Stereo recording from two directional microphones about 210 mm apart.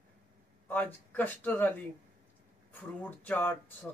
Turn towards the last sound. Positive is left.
turn(degrees=10)  # may be behind; listen again after turning